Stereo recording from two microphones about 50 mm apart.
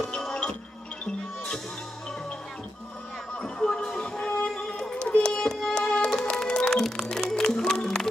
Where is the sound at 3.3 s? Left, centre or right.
Centre.